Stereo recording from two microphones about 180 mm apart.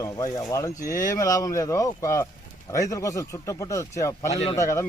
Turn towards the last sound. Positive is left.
turn(degrees=15)  # may be behind; listen again after turning